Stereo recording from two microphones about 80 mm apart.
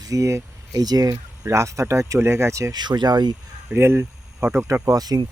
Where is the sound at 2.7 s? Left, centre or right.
Right.